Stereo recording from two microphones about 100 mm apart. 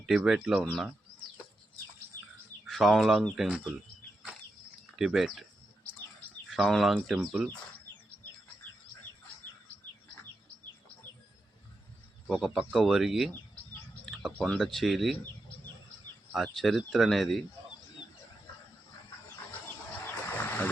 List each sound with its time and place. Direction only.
0.0 s speech: 5° right (ahead or behind)
0.6 s speech: 5° left (ahead or behind)
2.6 s speech: centre (ahead or behind)
4.9 s speech: 5° right (ahead or behind)
6.5 s speech: centre (ahead or behind)
12.3 s speech: 5° right (ahead or behind)
14.0 s a sound: centre (ahead or behind)
14.3 s speech: 10° left (ahead or behind)
14.6 s speech: centre (ahead or behind)
16.3 s speech: centre (ahead or behind)
20.1 s a sound: 20° left (ahead or behind)